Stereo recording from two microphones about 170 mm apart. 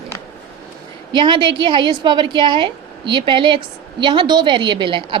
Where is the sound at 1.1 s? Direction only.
30° right (ahead or behind).